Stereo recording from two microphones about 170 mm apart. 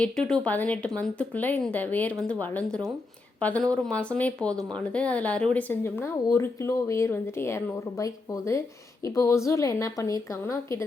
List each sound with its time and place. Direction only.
0.0 s speech: 5° left (ahead or behind)